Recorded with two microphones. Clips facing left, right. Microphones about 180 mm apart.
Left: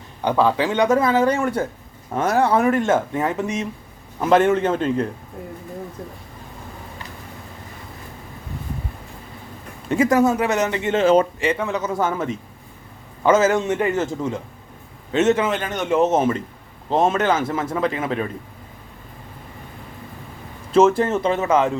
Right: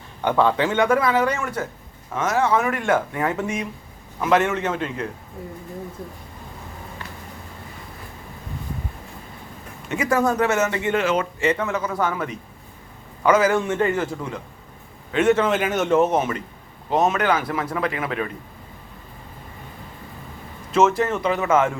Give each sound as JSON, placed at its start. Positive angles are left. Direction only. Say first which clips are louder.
{"t": 0.3, "sound": "speech", "louder": "left 1 dB", "side_deg": 10}
{"t": 4.2, "sound": "speech", "louder": "left 4 dB", "side_deg": 30}
{"t": 9.9, "sound": "speech", "louder": "left 7 dB", "side_deg": 30}
{"t": 10.2, "sound": "speech", "louder": "left 1 dB", "side_deg": 10}
{"t": 11.3, "sound": "speech", "louder": "even", "side_deg": 15}
{"t": 15.1, "sound": "a man's voice", "louder": "left 1 dB", "side_deg": 20}
{"t": 15.4, "sound": "a man's voice", "louder": "right 3 dB", "side_deg": -5}
{"t": 15.9, "sound": "speech", "louder": "left 3 dB", "side_deg": 20}
{"t": 20.7, "sound": "speech", "louder": "left 3 dB", "side_deg": 30}